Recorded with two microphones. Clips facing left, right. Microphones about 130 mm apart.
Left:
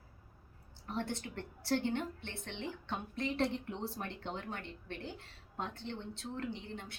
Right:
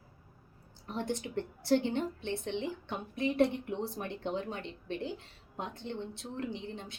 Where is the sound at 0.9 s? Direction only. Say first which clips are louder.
Right 3 dB; 15° right (ahead or behind).